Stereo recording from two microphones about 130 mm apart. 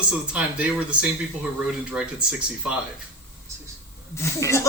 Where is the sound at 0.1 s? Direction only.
10° right (ahead or behind).